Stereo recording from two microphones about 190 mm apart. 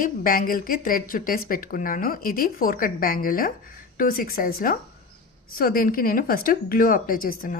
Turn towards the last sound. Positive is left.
turn(degrees=50)  # may be behind; listen again after turning